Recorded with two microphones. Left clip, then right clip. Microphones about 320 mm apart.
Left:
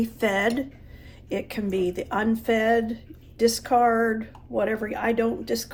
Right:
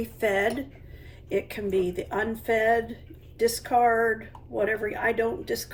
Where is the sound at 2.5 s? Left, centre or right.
Left.